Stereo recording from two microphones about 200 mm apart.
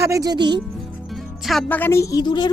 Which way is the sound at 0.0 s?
15° right (ahead or behind).